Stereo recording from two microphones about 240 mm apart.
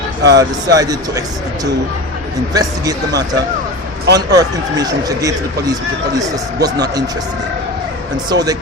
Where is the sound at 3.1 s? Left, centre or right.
Right.